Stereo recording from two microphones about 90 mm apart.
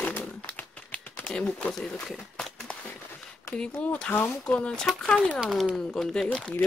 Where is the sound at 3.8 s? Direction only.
15° left (ahead or behind).